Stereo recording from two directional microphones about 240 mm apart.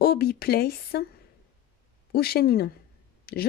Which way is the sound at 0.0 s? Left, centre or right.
Left.